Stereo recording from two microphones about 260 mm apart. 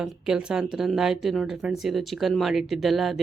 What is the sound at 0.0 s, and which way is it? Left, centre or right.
Speech, centre.